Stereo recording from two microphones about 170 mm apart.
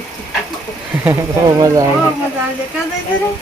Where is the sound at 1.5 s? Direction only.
20° right (ahead or behind).